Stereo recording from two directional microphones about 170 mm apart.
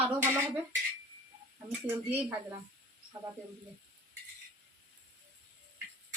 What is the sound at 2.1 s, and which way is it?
Speech, 10° right (ahead or behind).